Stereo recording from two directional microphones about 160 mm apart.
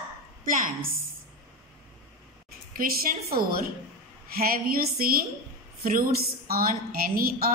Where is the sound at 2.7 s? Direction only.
65° right (ahead or behind).